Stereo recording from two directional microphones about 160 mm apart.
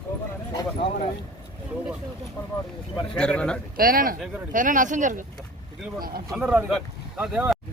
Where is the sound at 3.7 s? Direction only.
65° right (ahead or behind).